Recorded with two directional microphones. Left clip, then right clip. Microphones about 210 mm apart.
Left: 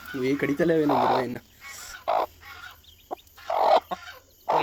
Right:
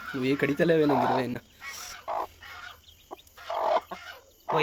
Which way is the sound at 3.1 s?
40° left (ahead or behind).